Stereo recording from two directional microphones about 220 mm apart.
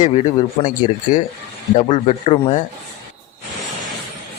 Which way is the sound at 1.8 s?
30° left (ahead or behind).